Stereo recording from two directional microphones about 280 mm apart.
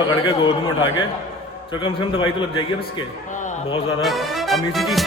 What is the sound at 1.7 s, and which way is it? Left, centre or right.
Speech, centre.